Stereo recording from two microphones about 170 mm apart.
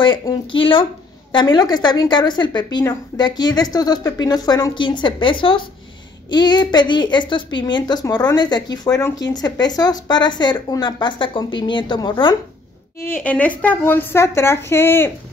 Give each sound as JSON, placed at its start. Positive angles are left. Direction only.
{"t": 0.0, "sound": "a woman's voice", "side_deg": 30}
{"t": 13.1, "sound": "speech", "side_deg": 10}